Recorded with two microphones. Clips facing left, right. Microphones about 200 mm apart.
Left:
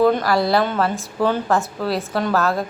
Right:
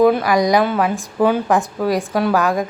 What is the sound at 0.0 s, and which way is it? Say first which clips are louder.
A woman's voice: right 3 dB; 10° right (ahead or behind).